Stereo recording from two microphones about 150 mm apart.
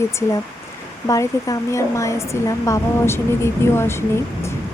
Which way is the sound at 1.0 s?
20° left (ahead or behind).